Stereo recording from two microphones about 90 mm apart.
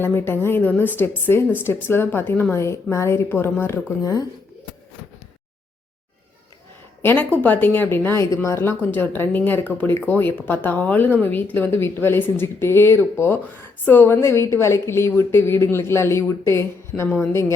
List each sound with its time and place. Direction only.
0.0 s a woman's voice: 25° left (ahead or behind)
2.6 s a woman's voice: 30° left (ahead or behind)
4.0 s speech: 40° left (ahead or behind)
7.0 s a woman's voice: 20° left (ahead or behind)
8.8 s a woman's voice: 20° left (ahead or behind)
16.9 s a woman's voice: 10° left (ahead or behind)